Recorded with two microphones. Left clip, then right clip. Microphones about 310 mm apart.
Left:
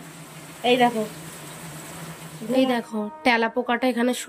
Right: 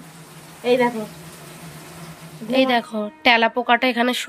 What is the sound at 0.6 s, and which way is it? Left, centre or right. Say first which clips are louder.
Speech: right 1 dB; centre.